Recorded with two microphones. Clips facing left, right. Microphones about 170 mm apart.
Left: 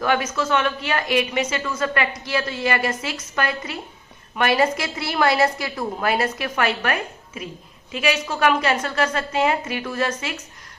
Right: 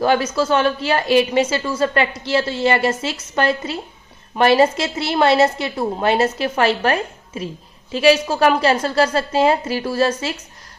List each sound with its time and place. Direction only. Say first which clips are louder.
0.0 s a woman's voice: right 5 dB; 30° right (ahead or behind)